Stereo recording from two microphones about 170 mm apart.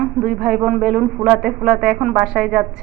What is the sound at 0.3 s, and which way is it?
Speech, 5° right (ahead or behind).